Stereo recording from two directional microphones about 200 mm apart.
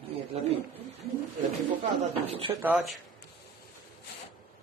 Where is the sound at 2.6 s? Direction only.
5° right (ahead or behind).